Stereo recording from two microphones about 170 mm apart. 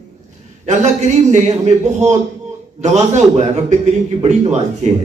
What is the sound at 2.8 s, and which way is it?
A man's voice, 45° right (ahead or behind).